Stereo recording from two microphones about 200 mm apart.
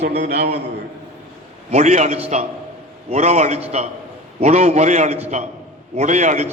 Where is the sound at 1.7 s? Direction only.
35° right (ahead or behind).